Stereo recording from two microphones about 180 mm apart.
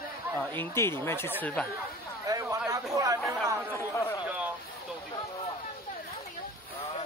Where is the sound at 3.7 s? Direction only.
15° left (ahead or behind).